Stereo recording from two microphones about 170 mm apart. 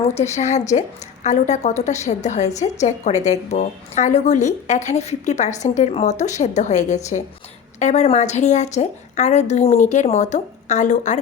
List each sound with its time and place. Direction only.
0.3 s a woman's voice: 45° left (ahead or behind)